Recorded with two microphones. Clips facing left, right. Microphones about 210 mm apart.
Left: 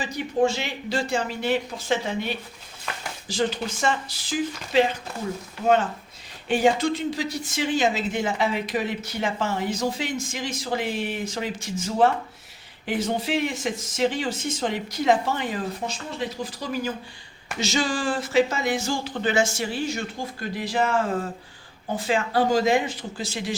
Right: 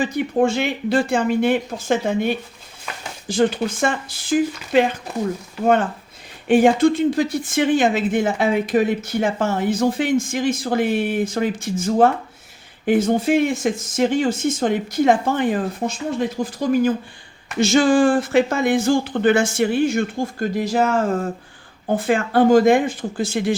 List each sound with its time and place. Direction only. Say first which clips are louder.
0.0 s speech: right 5 dB; 55° right (ahead or behind)
6.5 s speech: right 7 dB; 55° right (ahead or behind)